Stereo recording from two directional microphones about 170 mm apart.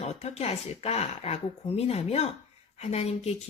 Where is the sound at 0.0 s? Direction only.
40° left (ahead or behind).